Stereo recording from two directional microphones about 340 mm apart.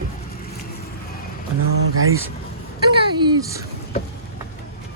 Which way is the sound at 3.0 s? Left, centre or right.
Centre.